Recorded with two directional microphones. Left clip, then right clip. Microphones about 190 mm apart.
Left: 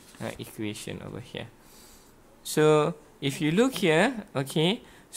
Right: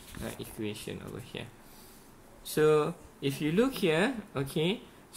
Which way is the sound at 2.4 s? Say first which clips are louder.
Left 4 dB; 50° left (ahead or behind).